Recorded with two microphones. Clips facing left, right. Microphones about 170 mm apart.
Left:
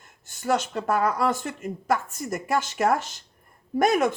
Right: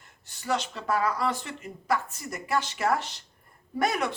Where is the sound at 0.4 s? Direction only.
45° left (ahead or behind).